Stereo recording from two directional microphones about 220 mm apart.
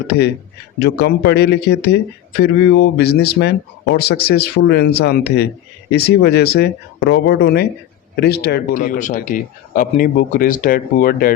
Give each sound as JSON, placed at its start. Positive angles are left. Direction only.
{"t": 0.8, "sound": "speech", "side_deg": 45}